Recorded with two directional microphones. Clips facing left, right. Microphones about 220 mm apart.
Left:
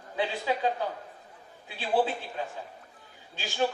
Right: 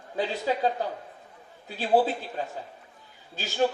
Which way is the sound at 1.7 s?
40° right (ahead or behind).